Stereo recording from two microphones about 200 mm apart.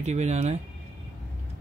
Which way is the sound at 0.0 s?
35° right (ahead or behind).